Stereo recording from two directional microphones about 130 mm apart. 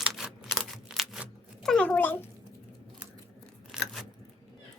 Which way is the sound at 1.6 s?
10° left (ahead or behind).